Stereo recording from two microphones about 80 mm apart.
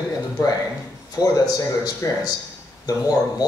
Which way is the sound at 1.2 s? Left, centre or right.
Left.